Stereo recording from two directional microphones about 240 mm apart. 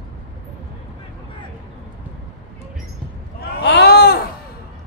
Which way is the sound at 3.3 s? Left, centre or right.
Left.